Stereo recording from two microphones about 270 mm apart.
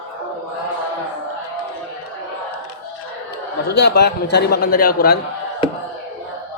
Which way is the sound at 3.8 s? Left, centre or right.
Left.